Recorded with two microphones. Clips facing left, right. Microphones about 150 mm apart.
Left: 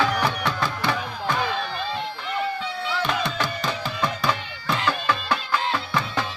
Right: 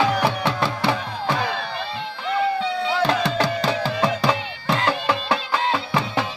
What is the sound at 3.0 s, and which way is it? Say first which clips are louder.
Music: right 4 dB; 35° right (ahead or behind).